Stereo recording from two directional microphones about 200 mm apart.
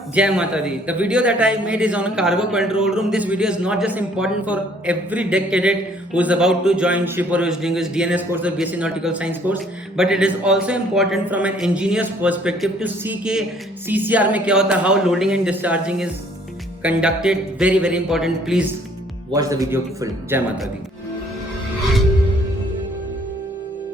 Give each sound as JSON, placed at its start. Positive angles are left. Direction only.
{"t": 0.1, "sound": "a man's voice", "side_deg": -5}
{"t": 19.3, "sound": "a man's voice", "side_deg": -15}